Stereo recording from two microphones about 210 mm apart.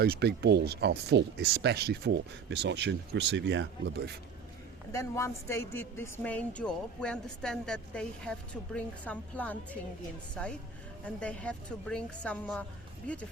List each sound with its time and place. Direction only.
0.0 s speech: 50° right (ahead or behind)
4.9 s a woman's voice: 15° left (ahead or behind)